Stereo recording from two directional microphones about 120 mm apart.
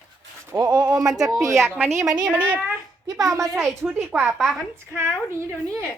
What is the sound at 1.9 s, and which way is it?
Speech, 30° right (ahead or behind).